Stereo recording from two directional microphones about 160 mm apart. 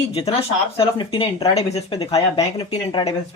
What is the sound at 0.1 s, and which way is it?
Speech, 35° left (ahead or behind).